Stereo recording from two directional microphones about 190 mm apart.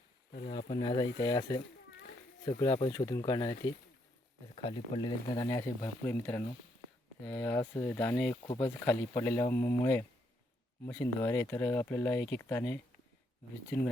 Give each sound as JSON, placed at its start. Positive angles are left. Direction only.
{"t": 0.4, "sound": "speech", "side_deg": 30}
{"t": 4.5, "sound": "speech", "side_deg": 30}